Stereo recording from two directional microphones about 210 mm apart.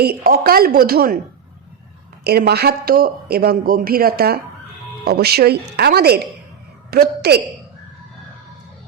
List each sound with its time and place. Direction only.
0.0 s a man's voice: 45° right (ahead or behind)
2.2 s a man's voice: 50° right (ahead or behind)